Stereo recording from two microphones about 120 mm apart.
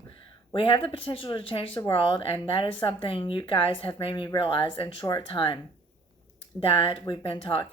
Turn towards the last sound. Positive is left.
turn(degrees=45)  # may be behind; listen again after turning